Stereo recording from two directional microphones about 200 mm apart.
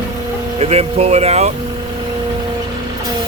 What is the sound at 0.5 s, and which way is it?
Speech, 30° right (ahead or behind).